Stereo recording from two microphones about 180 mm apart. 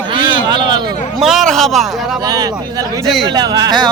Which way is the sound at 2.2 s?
20° right (ahead or behind).